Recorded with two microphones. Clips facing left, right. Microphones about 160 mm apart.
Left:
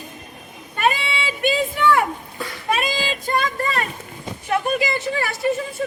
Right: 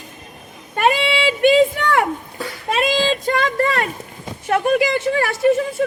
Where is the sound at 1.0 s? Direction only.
65° right (ahead or behind).